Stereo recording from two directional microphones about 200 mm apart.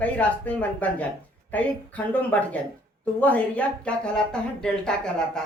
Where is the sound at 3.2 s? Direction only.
5° left (ahead or behind).